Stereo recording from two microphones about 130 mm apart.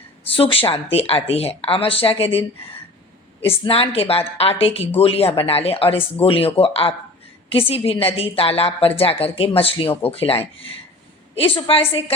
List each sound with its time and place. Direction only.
0.3 s speech: 45° left (ahead or behind)
3.4 s speech: 45° left (ahead or behind)